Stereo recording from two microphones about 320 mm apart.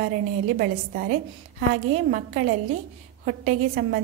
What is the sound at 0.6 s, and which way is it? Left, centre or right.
A woman's voice, right.